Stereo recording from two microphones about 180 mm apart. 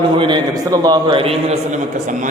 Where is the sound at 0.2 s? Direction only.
25° right (ahead or behind).